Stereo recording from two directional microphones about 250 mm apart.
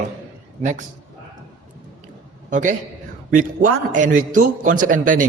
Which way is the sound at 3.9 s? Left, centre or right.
Right.